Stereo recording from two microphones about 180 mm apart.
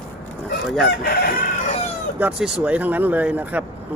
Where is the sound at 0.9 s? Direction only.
60° left (ahead or behind).